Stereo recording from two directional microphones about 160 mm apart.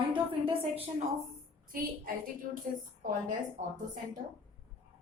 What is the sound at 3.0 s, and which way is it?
Speech, 55° right (ahead or behind).